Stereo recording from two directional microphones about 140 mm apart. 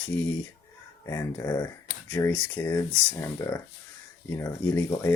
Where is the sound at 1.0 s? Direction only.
20° left (ahead or behind).